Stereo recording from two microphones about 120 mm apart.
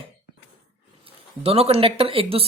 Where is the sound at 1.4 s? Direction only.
55° right (ahead or behind).